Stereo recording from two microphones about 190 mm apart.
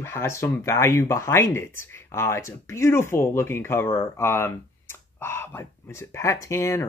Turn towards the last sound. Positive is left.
turn(degrees=15)  # may be behind; listen again after turning